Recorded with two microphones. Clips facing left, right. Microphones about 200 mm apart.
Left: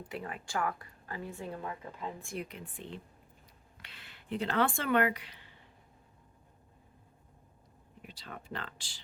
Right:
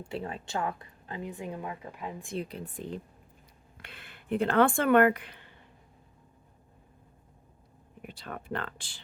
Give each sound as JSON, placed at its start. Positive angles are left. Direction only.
{"t": 0.0, "sound": "a woman's voice", "side_deg": -25}
{"t": 2.4, "sound": "speech", "side_deg": -35}
{"t": 3.8, "sound": "speech", "side_deg": -55}
{"t": 8.0, "sound": "speech", "side_deg": -55}